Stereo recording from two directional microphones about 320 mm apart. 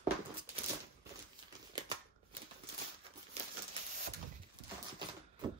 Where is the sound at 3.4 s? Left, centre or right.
Centre.